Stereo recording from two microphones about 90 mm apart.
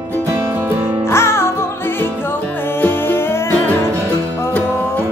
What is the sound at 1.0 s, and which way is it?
Music, 30° left (ahead or behind).